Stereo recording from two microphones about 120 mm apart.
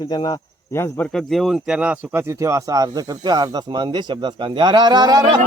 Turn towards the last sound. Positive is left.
turn(degrees=-35)  # may be behind; listen again after turning